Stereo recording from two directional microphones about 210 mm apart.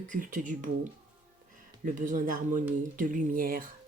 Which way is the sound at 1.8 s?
40° right (ahead or behind).